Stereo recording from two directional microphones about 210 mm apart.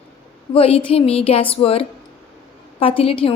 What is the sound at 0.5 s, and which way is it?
A woman's voice, 25° left (ahead or behind).